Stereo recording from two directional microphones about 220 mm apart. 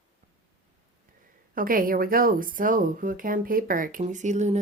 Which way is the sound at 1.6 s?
40° right (ahead or behind).